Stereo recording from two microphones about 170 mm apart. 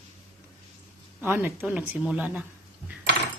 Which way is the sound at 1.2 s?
10° right (ahead or behind).